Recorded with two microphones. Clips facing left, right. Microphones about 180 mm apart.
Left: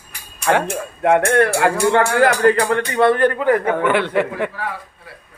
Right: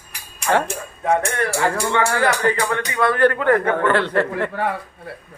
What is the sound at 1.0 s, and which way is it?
Speech, 75° left (ahead or behind).